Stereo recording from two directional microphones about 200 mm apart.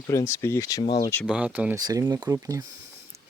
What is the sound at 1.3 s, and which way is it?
Speech, 5° right (ahead or behind).